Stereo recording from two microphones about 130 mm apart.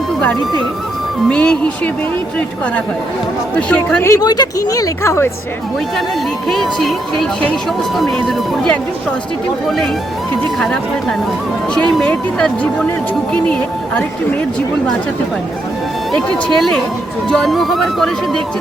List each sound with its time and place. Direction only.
1.3 s speech: 10° left (ahead or behind)
3.7 s speech: 10° left (ahead or behind)
4.1 s speech: 30° left (ahead or behind)
6.5 s speech: 5° left (ahead or behind)
11.7 s speech: 5° left (ahead or behind)
16.1 s speech: 5° left (ahead or behind)